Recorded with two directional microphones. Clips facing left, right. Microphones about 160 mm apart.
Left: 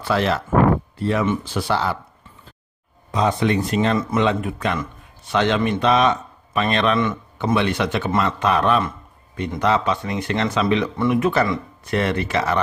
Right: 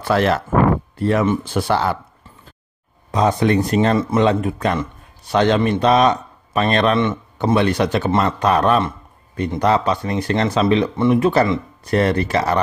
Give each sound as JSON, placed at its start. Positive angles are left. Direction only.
{"t": 0.0, "sound": "speech", "side_deg": -50}
{"t": 3.1, "sound": "a man's voice", "side_deg": -40}